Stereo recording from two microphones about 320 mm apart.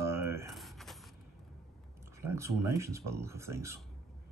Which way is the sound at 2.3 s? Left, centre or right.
Centre.